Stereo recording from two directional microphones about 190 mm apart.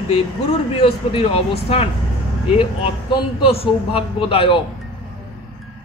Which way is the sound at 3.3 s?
30° left (ahead or behind).